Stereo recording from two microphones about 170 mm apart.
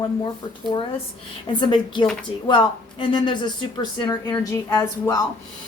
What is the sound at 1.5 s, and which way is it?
A woman's voice, 30° left (ahead or behind).